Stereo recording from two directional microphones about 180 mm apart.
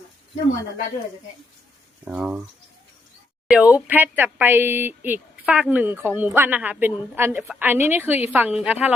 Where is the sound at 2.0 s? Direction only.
5° right (ahead or behind).